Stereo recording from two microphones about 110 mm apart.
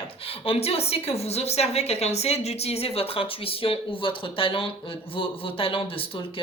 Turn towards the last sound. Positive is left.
turn(degrees=55)  # may be behind; listen again after turning